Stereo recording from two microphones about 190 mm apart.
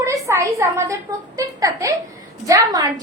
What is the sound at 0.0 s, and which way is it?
A woman's voice, 15° right (ahead or behind).